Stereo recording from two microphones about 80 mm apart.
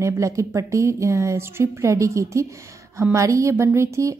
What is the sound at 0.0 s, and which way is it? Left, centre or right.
A woman's voice, right.